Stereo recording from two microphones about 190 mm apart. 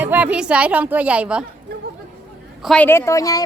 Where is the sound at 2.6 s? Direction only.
5° left (ahead or behind).